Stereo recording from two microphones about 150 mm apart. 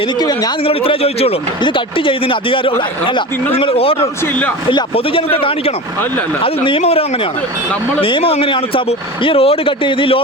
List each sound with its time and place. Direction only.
0.2 s a man's voice: 25° left (ahead or behind)
0.7 s speech: 40° left (ahead or behind)
8.0 s speech: 40° left (ahead or behind)